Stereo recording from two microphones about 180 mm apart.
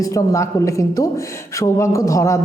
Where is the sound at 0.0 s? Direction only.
15° left (ahead or behind).